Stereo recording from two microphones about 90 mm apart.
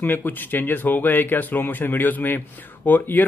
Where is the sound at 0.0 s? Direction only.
20° left (ahead or behind).